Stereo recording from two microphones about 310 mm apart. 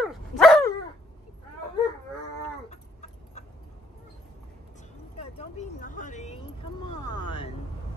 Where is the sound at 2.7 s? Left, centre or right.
Left.